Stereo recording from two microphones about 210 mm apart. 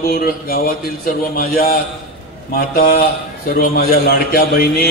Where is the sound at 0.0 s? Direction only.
45° left (ahead or behind).